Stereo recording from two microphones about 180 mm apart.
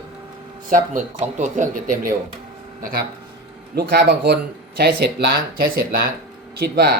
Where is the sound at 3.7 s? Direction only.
65° right (ahead or behind).